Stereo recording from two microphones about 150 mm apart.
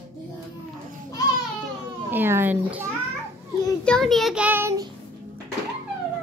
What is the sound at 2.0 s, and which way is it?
Speech, 15° right (ahead or behind).